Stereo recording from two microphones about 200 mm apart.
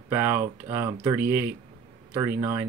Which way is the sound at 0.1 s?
10° right (ahead or behind).